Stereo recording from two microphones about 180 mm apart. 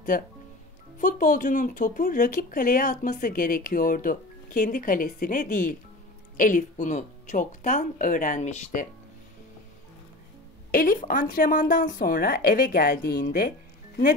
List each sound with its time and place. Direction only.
0.1 s speech: 50° left (ahead or behind)
10.7 s speech: 50° left (ahead or behind)